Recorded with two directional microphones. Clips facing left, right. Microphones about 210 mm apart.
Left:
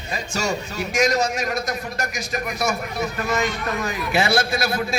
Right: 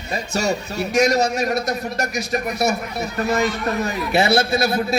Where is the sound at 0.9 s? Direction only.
30° right (ahead or behind).